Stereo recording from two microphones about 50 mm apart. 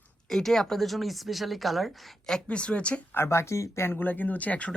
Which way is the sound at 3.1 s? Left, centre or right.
Left.